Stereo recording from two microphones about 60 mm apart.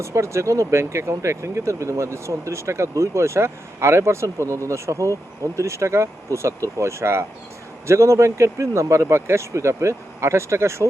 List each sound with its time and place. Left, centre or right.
0.0 s speech: right